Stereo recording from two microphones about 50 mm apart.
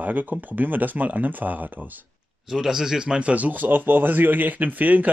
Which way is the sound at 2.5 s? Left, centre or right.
Centre.